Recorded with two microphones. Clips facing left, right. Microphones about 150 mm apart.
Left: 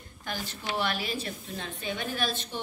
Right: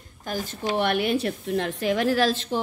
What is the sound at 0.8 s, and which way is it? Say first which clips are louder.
A woman's voice: right 9 dB; 60° right (ahead or behind).